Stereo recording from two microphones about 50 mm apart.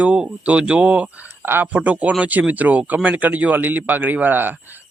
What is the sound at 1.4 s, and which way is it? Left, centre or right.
Speech, right.